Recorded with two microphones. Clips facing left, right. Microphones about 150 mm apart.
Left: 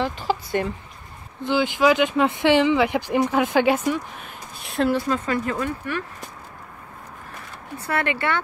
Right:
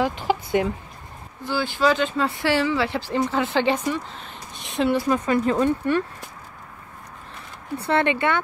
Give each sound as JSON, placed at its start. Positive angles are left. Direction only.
{"t": 0.0, "sound": "speech", "side_deg": -15}
{"t": 1.4, "sound": "speech", "side_deg": 20}
{"t": 5.0, "sound": "speech", "side_deg": -15}
{"t": 7.8, "sound": "speech", "side_deg": -25}